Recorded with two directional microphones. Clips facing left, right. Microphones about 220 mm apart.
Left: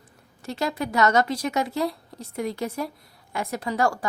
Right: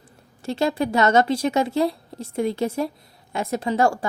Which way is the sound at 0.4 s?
30° right (ahead or behind).